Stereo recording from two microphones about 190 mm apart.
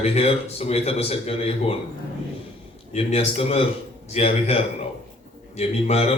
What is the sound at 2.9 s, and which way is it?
A man's voice, 35° left (ahead or behind).